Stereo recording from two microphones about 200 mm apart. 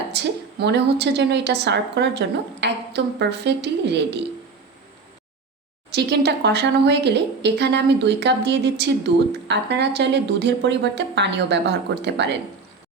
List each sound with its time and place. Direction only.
0.1 s a woman's voice: 60° right (ahead or behind)
5.9 s a woman's voice: 55° right (ahead or behind)